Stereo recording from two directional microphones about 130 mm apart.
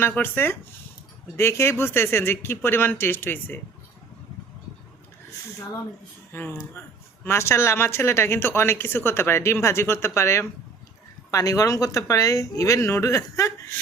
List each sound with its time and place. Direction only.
0.0 s a woman's voice: 15° left (ahead or behind)
6.3 s a woman's voice: 15° left (ahead or behind)